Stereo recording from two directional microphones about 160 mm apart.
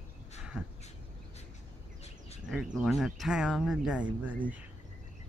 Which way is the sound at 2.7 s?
Centre (ahead or behind).